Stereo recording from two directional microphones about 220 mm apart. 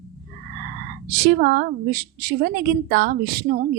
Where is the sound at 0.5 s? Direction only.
50° right (ahead or behind).